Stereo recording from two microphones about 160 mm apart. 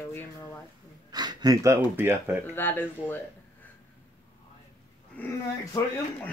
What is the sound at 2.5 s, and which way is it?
Speech, 15° left (ahead or behind).